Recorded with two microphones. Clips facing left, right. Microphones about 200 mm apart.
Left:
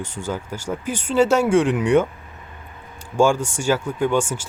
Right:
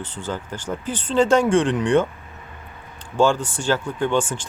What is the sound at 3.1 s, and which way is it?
Speech, 10° left (ahead or behind).